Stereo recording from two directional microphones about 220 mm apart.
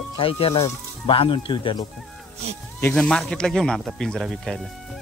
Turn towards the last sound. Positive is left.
turn(degrees=0)  # may be behind; listen again after turning